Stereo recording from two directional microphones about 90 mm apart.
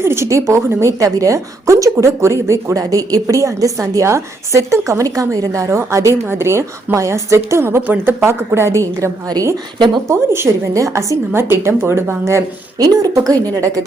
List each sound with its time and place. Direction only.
0.0 s a woman's voice: 30° right (ahead or behind)
9.7 s speech: 55° right (ahead or behind)
10.1 s a woman's voice: 30° right (ahead or behind)
11.3 s speech: 25° right (ahead or behind)
12.8 s speech: 45° right (ahead or behind)